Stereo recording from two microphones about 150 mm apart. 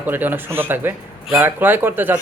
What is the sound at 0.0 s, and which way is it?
Speech, 10° right (ahead or behind).